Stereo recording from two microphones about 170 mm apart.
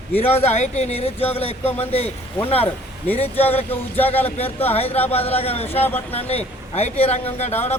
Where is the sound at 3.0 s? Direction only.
10° left (ahead or behind).